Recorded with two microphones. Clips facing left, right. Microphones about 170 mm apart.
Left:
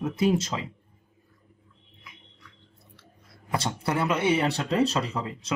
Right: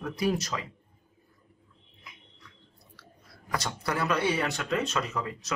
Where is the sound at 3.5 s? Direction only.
25° left (ahead or behind).